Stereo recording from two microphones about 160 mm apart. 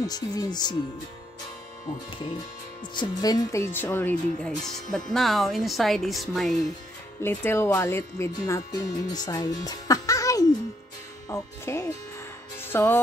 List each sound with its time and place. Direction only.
0.0 s speech: 25° left (ahead or behind)
2.1 s speech: 30° left (ahead or behind); by 6.6 s centre (ahead or behind)
7.2 s speech: 15° left (ahead or behind)